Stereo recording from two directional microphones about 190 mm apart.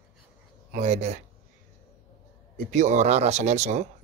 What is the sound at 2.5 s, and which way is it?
Speech, 40° right (ahead or behind).